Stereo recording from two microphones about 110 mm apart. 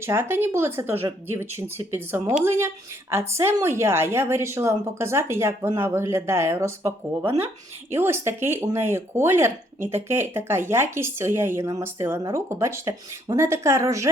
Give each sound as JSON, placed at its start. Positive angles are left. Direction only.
{"t": 0.0, "sound": "a woman's voice", "side_deg": -20}
{"t": 7.3, "sound": "speech", "side_deg": -65}
{"t": 7.9, "sound": "a woman's voice", "side_deg": -25}